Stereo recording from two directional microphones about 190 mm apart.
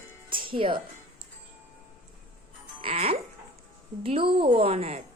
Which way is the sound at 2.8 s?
30° right (ahead or behind).